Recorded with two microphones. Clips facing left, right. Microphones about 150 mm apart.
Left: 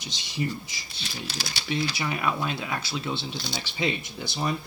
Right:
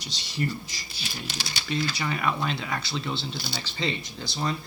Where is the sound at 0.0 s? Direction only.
15° left (ahead or behind).